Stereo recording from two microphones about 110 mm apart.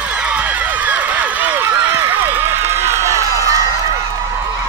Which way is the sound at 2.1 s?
20° right (ahead or behind).